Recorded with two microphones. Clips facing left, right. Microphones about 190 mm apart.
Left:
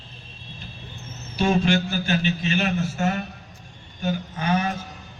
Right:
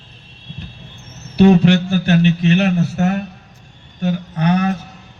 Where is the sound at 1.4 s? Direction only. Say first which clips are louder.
Right 9 dB; 70° right (ahead or behind).